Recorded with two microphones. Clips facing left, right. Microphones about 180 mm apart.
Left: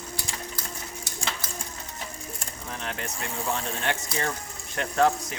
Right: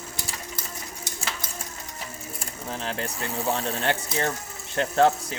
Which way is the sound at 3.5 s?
35° right (ahead or behind).